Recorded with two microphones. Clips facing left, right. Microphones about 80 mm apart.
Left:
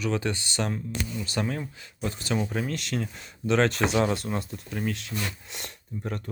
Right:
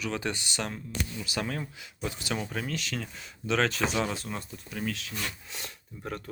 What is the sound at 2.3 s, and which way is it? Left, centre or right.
Speech, centre.